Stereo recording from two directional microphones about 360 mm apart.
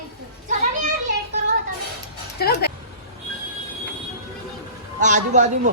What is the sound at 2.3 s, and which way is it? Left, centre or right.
Speech, left.